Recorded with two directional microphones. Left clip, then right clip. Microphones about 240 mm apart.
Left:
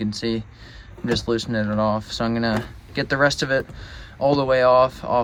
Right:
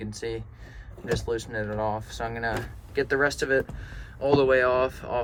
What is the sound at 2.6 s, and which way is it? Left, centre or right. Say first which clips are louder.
Speech: left 2 dB; centre.